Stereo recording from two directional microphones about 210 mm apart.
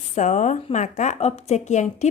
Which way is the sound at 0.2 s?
35° left (ahead or behind).